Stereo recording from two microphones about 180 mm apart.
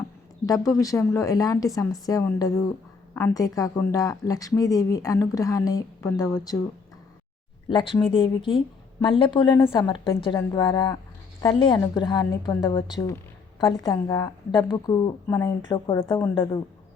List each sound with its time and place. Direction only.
0.7 s speech: 20° left (ahead or behind)
7.7 s speech: 30° left (ahead or behind)
12.7 s speech: 30° left (ahead or behind)